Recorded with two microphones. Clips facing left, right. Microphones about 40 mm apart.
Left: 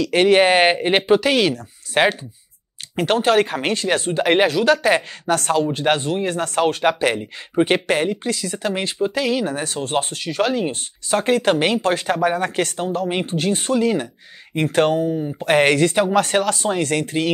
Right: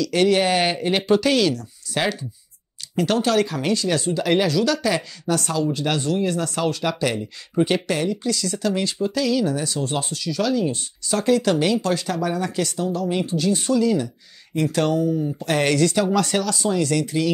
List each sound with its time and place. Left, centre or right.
0.0 s speech: left